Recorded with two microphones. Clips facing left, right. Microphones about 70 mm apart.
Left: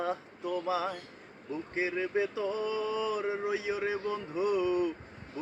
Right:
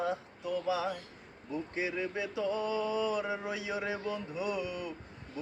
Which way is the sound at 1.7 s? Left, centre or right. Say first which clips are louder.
Left 5 dB; left.